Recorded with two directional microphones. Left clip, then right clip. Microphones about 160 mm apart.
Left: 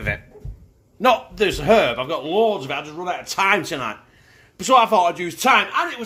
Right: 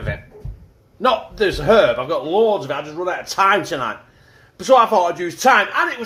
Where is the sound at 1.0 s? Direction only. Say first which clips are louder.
Even; 50° left (ahead or behind).